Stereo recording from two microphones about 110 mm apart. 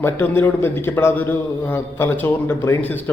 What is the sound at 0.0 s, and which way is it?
A man's voice, 20° left (ahead or behind).